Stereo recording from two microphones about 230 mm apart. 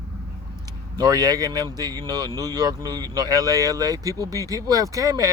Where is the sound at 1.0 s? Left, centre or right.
Centre.